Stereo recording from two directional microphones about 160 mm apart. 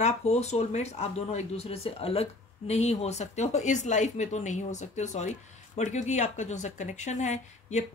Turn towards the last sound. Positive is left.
turn(degrees=45)  # may be behind; listen again after turning